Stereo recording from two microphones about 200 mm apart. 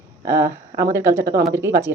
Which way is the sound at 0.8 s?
15° right (ahead or behind).